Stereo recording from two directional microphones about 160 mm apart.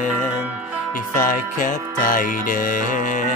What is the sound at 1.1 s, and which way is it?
Music, 55° left (ahead or behind).